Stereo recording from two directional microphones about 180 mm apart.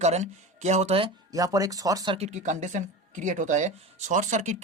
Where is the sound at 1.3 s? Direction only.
20° right (ahead or behind).